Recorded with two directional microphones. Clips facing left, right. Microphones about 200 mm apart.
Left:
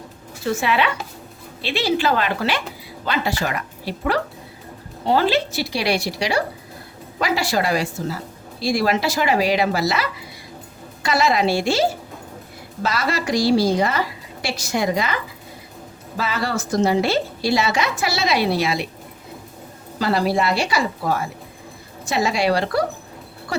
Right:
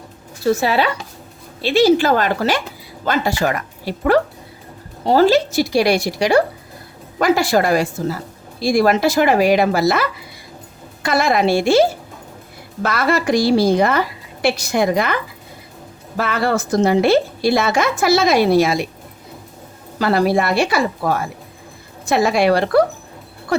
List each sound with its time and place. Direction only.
0.4 s a woman's voice: 35° right (ahead or behind)
20.0 s a woman's voice: 55° right (ahead or behind)
22.1 s a woman's voice: 55° right (ahead or behind)